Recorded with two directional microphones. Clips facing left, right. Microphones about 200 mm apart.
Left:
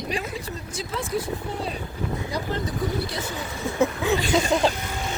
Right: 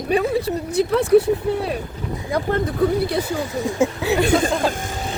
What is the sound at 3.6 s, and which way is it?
Speech, 15° right (ahead or behind).